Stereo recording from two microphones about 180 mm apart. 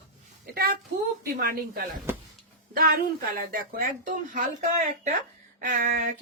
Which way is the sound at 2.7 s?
55° right (ahead or behind).